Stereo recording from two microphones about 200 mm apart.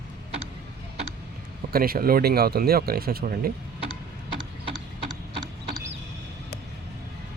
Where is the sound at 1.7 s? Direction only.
45° right (ahead or behind).